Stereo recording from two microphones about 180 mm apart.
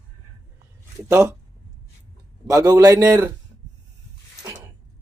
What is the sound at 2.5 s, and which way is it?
Speech, 20° right (ahead or behind).